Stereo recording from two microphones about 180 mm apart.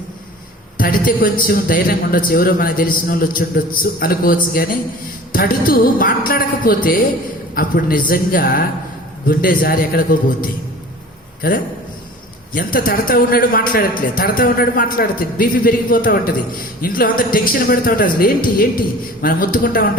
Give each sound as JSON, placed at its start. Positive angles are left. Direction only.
{"t": 0.8, "sound": "a man's voice", "side_deg": 50}